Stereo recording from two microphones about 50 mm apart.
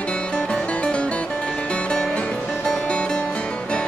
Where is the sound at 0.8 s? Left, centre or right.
Left.